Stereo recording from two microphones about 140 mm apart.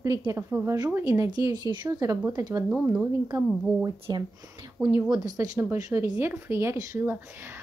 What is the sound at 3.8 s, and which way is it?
A woman's voice, 30° right (ahead or behind).